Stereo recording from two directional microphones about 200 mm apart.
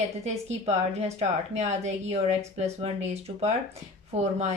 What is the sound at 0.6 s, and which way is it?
A woman's voice, 30° right (ahead or behind).